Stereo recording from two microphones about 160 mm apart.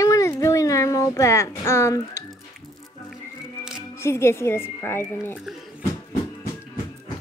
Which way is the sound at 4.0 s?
15° left (ahead or behind).